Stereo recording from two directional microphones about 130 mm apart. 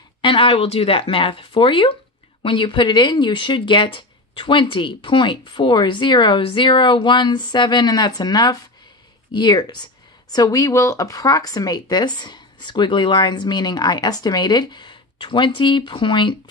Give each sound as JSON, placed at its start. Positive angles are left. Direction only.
{"t": 0.2, "sound": "speech", "side_deg": 40}